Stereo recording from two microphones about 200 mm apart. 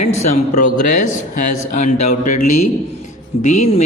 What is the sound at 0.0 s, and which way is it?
Speech, 35° left (ahead or behind).